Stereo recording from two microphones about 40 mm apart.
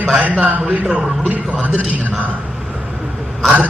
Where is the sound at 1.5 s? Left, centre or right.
Right.